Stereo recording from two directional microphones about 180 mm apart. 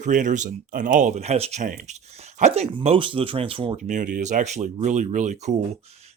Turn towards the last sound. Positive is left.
turn(degrees=-40)  # may be behind; listen again after turning